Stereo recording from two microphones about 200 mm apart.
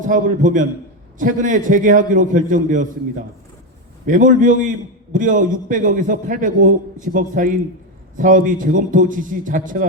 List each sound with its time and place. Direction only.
0.0 s a man's voice: 40° right (ahead or behind)
4.0 s a man's voice: 40° right (ahead or behind)